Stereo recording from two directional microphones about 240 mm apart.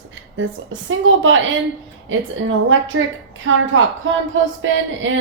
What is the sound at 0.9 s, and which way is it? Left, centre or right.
A woman's voice, right.